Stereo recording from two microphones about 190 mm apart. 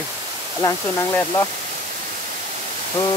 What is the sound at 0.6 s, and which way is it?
Speech, 15° left (ahead or behind).